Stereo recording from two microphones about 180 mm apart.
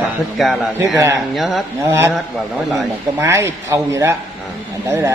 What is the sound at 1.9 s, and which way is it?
Speech, 10° right (ahead or behind).